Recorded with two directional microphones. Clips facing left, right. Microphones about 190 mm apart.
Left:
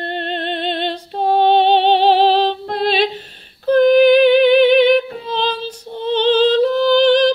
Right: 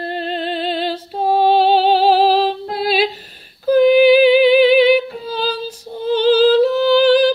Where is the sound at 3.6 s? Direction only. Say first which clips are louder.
Even; 5° right (ahead or behind).